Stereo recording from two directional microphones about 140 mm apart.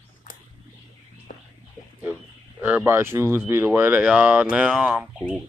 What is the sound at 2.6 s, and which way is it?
Speech, 15° right (ahead or behind).